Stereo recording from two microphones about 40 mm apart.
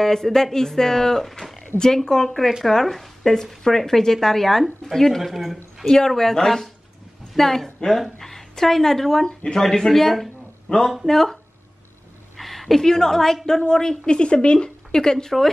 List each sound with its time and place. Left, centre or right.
0.0 s speech: centre
5.9 s speech: centre
12.4 s a woman's voice: centre